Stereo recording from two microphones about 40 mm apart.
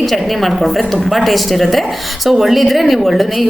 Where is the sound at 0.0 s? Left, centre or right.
Centre.